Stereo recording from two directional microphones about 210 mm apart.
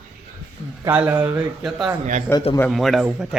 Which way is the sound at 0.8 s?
10° right (ahead or behind).